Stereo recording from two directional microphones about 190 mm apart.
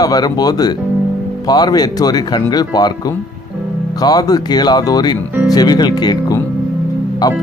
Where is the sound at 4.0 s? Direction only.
20° left (ahead or behind).